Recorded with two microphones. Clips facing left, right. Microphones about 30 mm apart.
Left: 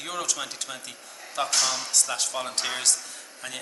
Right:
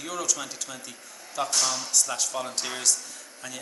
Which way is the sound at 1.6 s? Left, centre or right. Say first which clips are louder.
Left 1 dB; centre.